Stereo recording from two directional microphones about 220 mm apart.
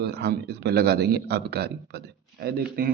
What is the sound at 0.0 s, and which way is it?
Speech, 50° right (ahead or behind).